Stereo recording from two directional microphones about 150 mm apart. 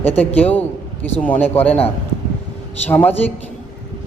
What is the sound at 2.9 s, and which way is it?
Speech, 10° left (ahead or behind).